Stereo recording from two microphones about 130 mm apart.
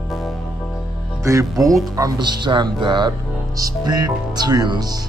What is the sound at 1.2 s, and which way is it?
Speech, 25° right (ahead or behind).